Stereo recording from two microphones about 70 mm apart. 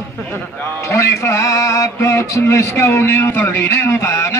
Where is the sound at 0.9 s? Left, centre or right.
Left.